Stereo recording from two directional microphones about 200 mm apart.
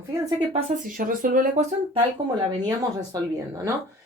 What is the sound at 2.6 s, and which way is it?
Speech, 20° right (ahead or behind).